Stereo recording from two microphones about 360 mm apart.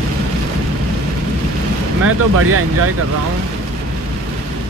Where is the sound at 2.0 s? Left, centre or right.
Right.